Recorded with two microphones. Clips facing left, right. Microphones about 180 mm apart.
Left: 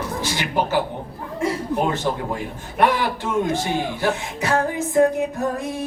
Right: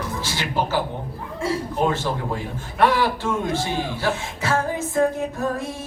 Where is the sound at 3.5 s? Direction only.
15° left (ahead or behind).